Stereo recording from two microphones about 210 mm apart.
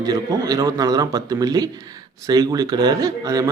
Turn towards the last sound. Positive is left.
turn(degrees=-15)  # may be behind; listen again after turning